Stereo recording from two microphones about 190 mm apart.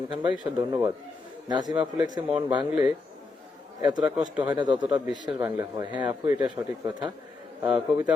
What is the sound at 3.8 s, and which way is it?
Speech, 20° right (ahead or behind).